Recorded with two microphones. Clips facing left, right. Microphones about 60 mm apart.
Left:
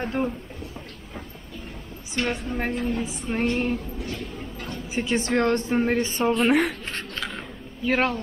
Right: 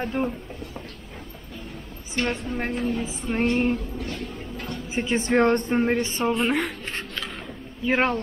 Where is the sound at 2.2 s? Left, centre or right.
Centre.